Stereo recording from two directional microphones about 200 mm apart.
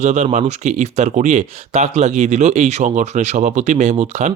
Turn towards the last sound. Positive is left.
turn(degrees=-35)  # may be behind; listen again after turning